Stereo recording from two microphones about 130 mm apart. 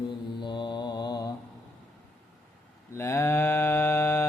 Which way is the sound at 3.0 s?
20° left (ahead or behind).